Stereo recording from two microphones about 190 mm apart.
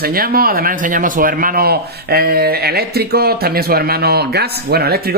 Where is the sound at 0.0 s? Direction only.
50° right (ahead or behind).